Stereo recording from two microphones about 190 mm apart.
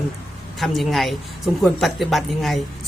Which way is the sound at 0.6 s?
Centre (ahead or behind).